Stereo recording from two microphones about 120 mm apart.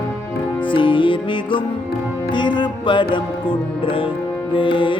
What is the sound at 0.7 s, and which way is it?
Music, 45° left (ahead or behind).